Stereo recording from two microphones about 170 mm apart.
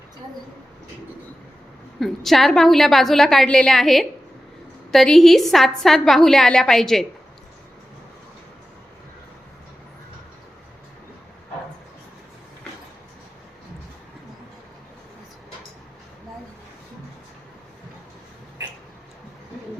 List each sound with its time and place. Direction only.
2.0 s a woman's voice: centre (ahead or behind)